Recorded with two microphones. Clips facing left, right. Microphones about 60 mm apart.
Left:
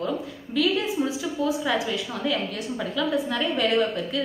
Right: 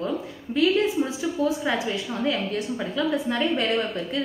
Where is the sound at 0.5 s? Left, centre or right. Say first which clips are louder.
Right 3 dB; right.